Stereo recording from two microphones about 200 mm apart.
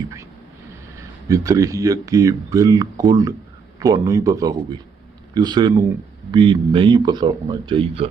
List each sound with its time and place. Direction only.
1.3 s speech: 15° right (ahead or behind)